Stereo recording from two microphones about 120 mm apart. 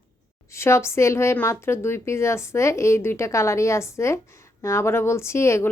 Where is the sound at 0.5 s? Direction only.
20° left (ahead or behind).